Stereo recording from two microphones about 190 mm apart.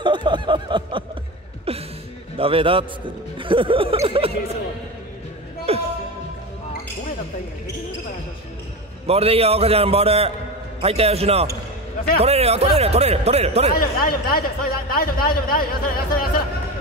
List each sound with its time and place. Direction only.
0.0 s a sound: 25° right (ahead or behind)
1.7 s music: 30° right (ahead or behind)
2.3 s snicker: 30° right (ahead or behind)
5.7 s music: 30° right (ahead or behind)
9.0 s speech: 30° right (ahead or behind)
13.7 s a man's voice: 50° left (ahead or behind)